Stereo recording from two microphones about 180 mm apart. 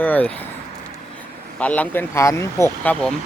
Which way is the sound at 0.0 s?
10° left (ahead or behind).